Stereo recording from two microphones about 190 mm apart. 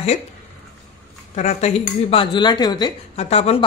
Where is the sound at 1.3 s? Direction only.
35° left (ahead or behind).